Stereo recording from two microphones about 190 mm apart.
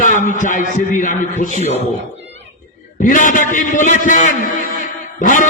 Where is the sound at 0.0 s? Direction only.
45° left (ahead or behind).